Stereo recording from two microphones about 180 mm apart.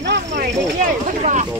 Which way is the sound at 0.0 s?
70° right (ahead or behind).